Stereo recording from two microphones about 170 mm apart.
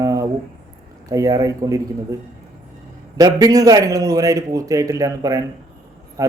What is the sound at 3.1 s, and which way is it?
A man's voice, 20° right (ahead or behind).